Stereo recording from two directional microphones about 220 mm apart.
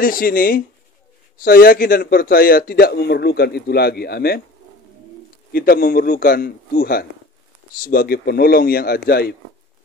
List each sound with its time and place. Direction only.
0.0 s a man's voice: 40° left (ahead or behind)
5.5 s a man's voice: 40° left (ahead or behind)